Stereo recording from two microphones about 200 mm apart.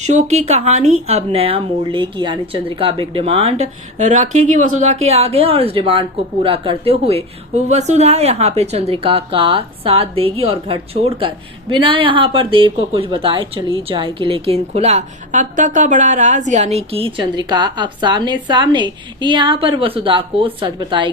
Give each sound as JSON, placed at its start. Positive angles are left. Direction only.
{"t": 0.0, "sound": "a woman's voice", "side_deg": -35}